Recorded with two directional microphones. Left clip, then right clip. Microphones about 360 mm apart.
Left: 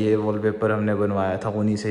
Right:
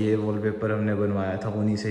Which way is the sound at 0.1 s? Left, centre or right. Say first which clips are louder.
Left 4 dB; centre.